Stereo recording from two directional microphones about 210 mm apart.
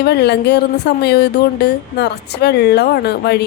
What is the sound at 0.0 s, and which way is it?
Speech, 50° left (ahead or behind).